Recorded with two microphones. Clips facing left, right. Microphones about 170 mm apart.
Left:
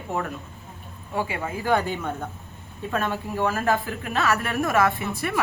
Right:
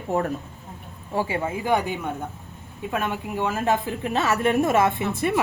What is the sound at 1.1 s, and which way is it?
Speech, 30° right (ahead or behind).